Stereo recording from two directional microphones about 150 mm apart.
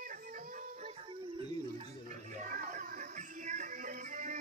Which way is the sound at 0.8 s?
40° right (ahead or behind).